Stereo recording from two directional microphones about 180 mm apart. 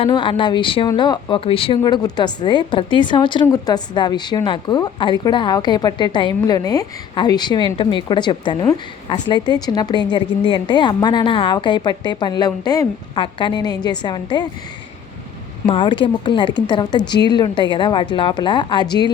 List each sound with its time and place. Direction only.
0.0 s a woman's voice: 25° left (ahead or behind)
15.6 s a woman's voice: 30° left (ahead or behind)